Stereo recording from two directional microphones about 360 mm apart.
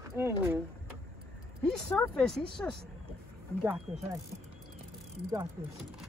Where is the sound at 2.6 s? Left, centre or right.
Centre.